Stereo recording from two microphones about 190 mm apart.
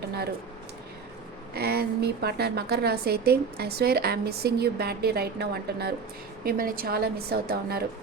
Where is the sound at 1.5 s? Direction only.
55° right (ahead or behind).